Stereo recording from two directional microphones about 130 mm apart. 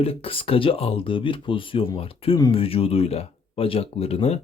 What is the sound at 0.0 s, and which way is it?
Speech, 45° left (ahead or behind).